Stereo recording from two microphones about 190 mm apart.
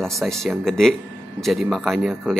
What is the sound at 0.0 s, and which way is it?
Speech, centre (ahead or behind).